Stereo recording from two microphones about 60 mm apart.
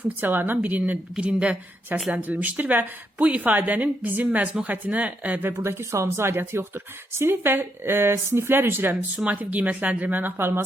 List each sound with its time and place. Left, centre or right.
0.2 s speech: right
1.1 s a woman's voice: centre
5.6 s a woman's voice: right